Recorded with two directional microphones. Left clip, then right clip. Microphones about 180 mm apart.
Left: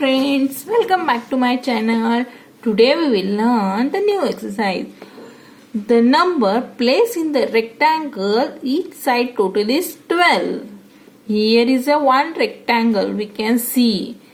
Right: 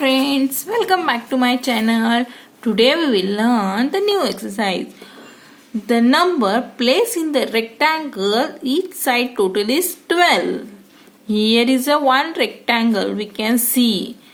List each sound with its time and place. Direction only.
0.0 s a woman's voice: 30° right (ahead or behind)
5.9 s a woman's voice: 30° right (ahead or behind)